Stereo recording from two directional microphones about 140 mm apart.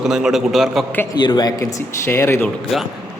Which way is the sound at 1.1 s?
30° left (ahead or behind).